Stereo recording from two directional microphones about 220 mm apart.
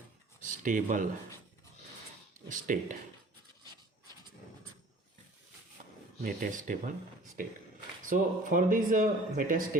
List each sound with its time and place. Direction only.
0.4 s speech: 35° right (ahead or behind)
2.5 s speech: 35° right (ahead or behind)
6.2 s speech: 35° right (ahead or behind)
8.1 s speech: 40° right (ahead or behind)